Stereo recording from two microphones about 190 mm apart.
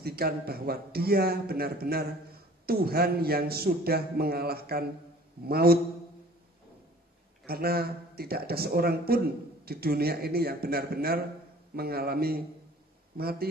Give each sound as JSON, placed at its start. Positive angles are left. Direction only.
{"t": 0.0, "sound": "a man's voice", "side_deg": -55}
{"t": 7.4, "sound": "a man's voice", "side_deg": -55}